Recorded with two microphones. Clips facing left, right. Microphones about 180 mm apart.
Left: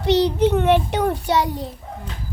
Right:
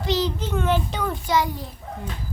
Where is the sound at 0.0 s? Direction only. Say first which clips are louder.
Left 8 dB; 70° left (ahead or behind).